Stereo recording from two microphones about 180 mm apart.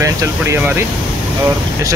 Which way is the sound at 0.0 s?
15° right (ahead or behind).